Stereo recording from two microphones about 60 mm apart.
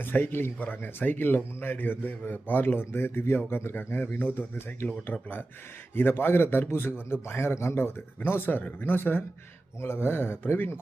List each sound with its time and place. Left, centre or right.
0.0 s speech: left
5.9 s speech: left